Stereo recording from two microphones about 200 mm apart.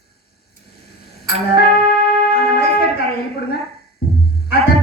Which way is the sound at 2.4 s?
50° left (ahead or behind).